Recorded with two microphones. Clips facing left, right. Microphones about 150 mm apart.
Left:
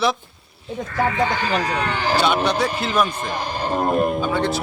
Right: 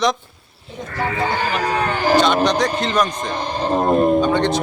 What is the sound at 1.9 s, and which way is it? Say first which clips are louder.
Speech: right 4 dB; 45° right (ahead or behind).